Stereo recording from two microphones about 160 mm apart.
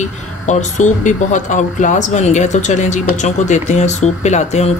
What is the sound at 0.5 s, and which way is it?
Speech, 45° left (ahead or behind).